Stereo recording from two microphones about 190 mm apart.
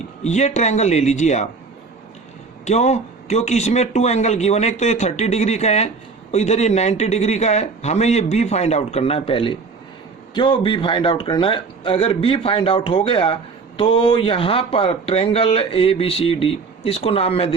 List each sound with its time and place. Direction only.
0.2 s speech: 35° left (ahead or behind)
2.6 s speech: 35° left (ahead or behind)